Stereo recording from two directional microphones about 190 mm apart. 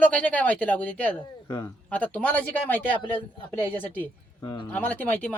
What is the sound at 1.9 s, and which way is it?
A woman's voice, 5° left (ahead or behind).